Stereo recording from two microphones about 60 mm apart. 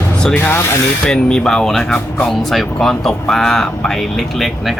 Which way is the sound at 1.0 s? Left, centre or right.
Centre.